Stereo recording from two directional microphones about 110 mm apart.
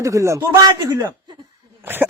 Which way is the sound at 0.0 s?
30° right (ahead or behind).